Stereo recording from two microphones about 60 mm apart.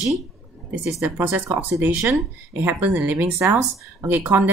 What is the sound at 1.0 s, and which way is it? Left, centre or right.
A woman's voice, right.